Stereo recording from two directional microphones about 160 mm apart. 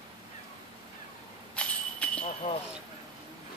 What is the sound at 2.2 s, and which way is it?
Speech, 45° left (ahead or behind).